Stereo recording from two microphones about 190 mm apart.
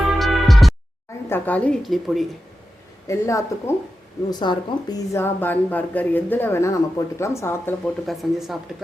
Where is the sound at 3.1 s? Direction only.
15° left (ahead or behind).